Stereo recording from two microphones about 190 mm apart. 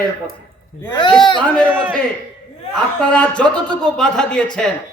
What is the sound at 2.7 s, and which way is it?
A man's voice, 5° left (ahead or behind).